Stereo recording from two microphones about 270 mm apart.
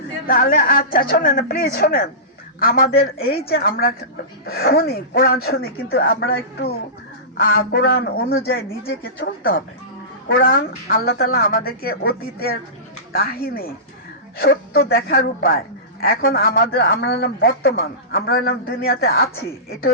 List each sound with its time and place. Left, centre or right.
0.3 s speech: left
3.2 s a woman's voice: left
4.4 s speech: left
10.2 s speech: left